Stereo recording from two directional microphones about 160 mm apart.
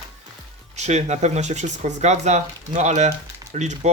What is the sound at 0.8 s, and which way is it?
Speech, 45° right (ahead or behind).